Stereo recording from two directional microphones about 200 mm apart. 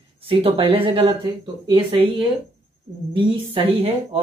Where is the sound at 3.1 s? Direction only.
25° right (ahead or behind).